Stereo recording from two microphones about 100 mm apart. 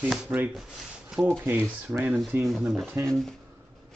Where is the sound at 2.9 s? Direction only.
25° right (ahead or behind).